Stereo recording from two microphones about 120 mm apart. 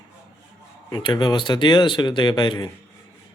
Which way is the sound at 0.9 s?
35° left (ahead or behind).